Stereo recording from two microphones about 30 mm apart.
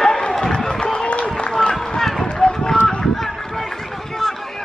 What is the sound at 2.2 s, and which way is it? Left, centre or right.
Run, left.